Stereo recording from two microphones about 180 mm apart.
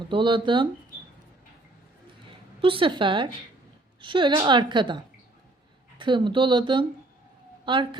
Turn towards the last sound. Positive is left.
turn(degrees=-25)  # may be behind; listen again after turning